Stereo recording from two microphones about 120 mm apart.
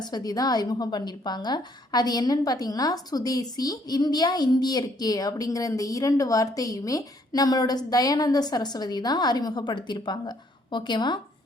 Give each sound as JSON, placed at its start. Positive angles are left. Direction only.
{"t": 0.0, "sound": "a woman's voice", "side_deg": 35}